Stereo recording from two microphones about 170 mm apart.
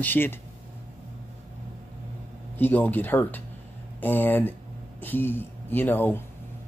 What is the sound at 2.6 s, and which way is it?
Speech, 10° left (ahead or behind).